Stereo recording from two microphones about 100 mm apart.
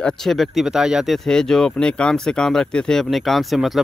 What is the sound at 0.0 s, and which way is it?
Speech, 5° left (ahead or behind).